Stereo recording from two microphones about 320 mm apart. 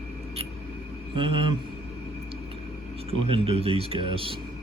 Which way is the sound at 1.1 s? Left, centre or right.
Centre.